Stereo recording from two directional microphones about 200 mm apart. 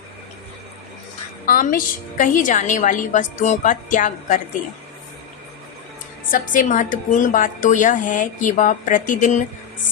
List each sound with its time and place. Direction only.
1.5 s a woman's voice: 40° left (ahead or behind)
6.5 s a woman's voice: 40° left (ahead or behind)